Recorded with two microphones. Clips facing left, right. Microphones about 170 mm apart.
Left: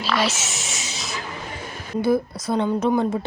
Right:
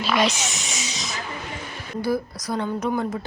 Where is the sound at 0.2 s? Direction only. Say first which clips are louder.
Right 2 dB; 5° left (ahead or behind).